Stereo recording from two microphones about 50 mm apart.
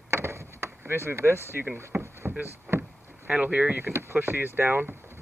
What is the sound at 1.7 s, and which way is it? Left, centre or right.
Vehicle, right.